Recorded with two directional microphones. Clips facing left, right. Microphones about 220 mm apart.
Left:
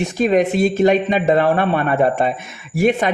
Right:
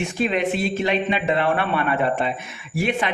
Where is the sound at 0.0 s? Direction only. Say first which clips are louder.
Left 6 dB; 40° left (ahead or behind).